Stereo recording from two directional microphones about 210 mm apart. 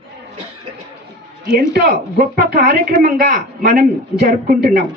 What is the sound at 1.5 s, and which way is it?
Speech, 45° right (ahead or behind).